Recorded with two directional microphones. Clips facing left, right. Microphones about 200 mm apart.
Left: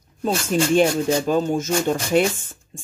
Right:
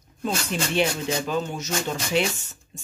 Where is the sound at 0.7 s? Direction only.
45° left (ahead or behind).